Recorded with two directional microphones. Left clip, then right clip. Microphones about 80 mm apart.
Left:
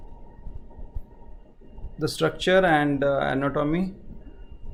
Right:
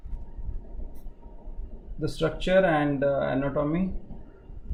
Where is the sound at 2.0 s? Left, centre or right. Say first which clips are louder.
Left 3 dB; left.